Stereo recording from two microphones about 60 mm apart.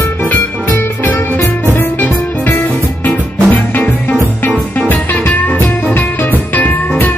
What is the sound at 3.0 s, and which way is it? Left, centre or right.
Music, left.